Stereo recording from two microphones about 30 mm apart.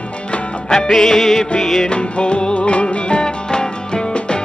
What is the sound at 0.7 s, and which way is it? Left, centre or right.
Music, centre.